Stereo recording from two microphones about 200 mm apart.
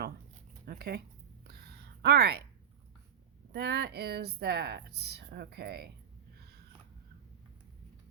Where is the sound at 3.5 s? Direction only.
55° right (ahead or behind).